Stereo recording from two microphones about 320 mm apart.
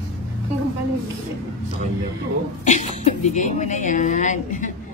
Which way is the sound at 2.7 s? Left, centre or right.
Left.